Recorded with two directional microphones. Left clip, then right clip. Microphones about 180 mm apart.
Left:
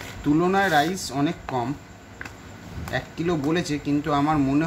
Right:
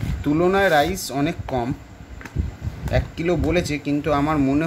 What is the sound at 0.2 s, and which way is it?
Speech, 35° right (ahead or behind).